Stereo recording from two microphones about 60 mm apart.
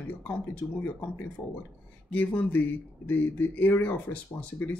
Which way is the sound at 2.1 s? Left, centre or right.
Left.